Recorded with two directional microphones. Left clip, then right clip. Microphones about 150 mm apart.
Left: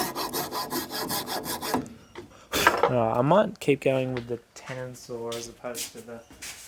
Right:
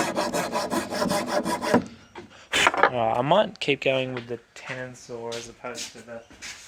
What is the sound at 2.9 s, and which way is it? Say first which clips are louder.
Mechanisms: right 1 dB; 75° left (ahead or behind).